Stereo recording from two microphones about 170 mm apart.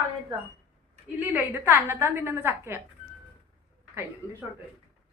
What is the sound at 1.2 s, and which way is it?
A woman's voice, 10° right (ahead or behind).